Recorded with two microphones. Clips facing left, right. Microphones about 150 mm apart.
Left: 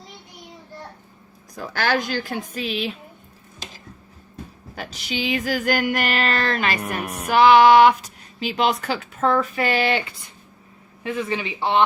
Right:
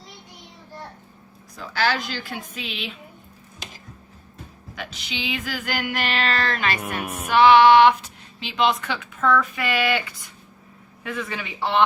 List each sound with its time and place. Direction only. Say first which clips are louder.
1.5 s a woman's voice: left 2 dB; 50° left (ahead or behind)
4.7 s child singing: left 4 dB; 40° left (ahead or behind)
7.0 s music: left 1 dB; 10° right (ahead or behind)
7.3 s child singing: left 1 dB; 40° left (ahead or behind)
11.0 s a man's voice: left 5 dB; 30° left (ahead or behind)